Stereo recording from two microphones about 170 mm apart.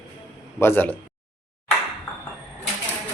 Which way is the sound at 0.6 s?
10° left (ahead or behind).